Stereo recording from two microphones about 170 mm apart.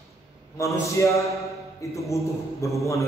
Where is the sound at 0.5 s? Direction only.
15° left (ahead or behind).